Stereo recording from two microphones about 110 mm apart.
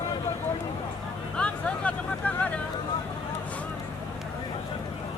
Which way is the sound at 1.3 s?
10° left (ahead or behind).